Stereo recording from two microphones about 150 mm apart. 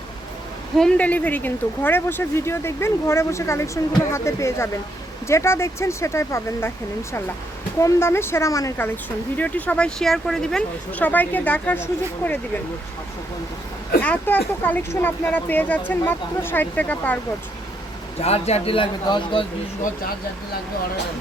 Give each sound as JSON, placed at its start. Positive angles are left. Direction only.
{"t": 0.8, "sound": "speech", "side_deg": 5}
{"t": 9.4, "sound": "speech", "side_deg": 10}
{"t": 14.0, "sound": "speech", "side_deg": 10}
{"t": 18.2, "sound": "a man's voice", "side_deg": 45}